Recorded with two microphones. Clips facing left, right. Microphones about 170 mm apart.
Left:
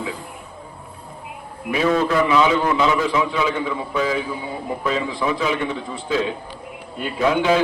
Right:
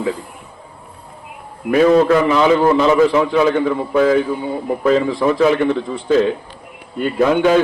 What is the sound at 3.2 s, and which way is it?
A man's voice, 45° right (ahead or behind).